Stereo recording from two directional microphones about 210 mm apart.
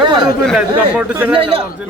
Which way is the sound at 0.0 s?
20° right (ahead or behind).